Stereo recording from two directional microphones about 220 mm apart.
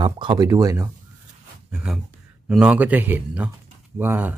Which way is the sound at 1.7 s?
5° right (ahead or behind).